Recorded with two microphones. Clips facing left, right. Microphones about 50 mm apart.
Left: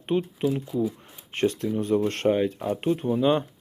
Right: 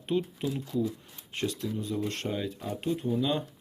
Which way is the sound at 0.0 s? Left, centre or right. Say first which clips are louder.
Left 5 dB; left.